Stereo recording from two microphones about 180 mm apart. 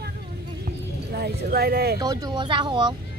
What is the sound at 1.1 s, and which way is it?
Speech, 60° right (ahead or behind).